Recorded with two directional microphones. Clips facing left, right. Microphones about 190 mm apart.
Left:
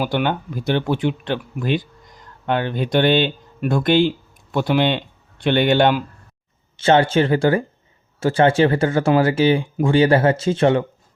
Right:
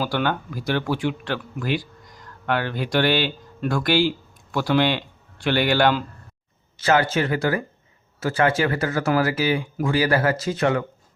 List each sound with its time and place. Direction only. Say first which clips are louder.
0.0 s speech: left 3 dB; 20° left (ahead or behind)